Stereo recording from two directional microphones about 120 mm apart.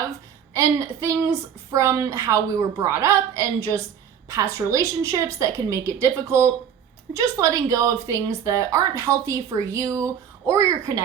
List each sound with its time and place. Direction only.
0.5 s a woman's voice: 25° right (ahead or behind)